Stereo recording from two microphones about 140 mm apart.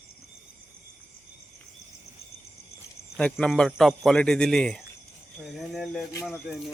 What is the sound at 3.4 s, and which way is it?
A man's voice, 5° left (ahead or behind).